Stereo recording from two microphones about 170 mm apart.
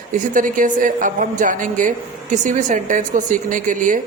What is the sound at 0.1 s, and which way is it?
A woman's voice, 50° right (ahead or behind).